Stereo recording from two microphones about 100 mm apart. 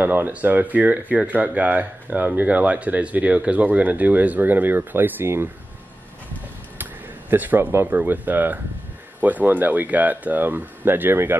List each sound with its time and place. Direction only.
0.0 s speech: 20° right (ahead or behind)
6.8 s speech: 20° right (ahead or behind)